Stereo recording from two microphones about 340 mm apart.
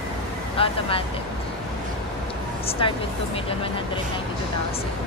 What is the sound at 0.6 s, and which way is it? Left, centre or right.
Speech, centre.